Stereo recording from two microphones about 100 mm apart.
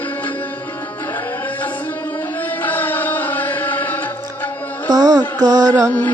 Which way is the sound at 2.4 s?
20° left (ahead or behind).